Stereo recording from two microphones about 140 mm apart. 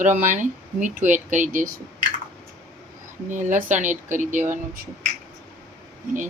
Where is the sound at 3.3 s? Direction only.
65° right (ahead or behind).